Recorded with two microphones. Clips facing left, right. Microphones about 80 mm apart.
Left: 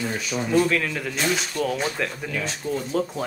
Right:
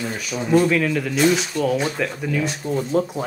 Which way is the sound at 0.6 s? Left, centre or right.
Centre.